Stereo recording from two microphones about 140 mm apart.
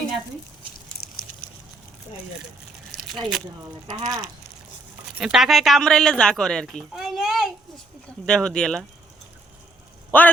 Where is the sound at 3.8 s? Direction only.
30° right (ahead or behind).